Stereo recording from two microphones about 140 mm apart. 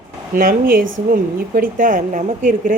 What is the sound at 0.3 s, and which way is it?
Speech, 90° right.